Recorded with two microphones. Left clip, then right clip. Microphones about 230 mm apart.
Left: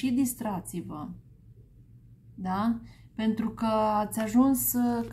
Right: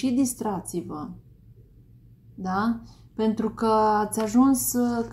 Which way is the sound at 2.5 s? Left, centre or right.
Left.